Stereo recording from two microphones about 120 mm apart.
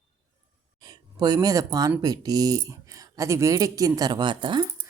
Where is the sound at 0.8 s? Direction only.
35° right (ahead or behind).